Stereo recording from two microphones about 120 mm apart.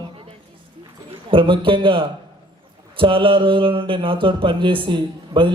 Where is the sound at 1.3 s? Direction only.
45° right (ahead or behind).